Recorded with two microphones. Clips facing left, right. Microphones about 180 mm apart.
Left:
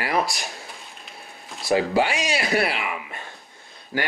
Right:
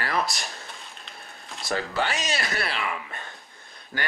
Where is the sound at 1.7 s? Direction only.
15° left (ahead or behind).